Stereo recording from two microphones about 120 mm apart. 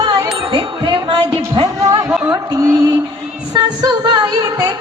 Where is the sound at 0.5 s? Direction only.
45° right (ahead or behind).